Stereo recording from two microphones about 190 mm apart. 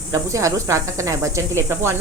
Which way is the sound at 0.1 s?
15° right (ahead or behind).